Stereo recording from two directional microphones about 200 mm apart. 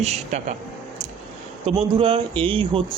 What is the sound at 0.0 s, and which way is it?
Speech, 35° right (ahead or behind).